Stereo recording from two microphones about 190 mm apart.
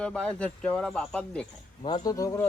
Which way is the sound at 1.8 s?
30° left (ahead or behind).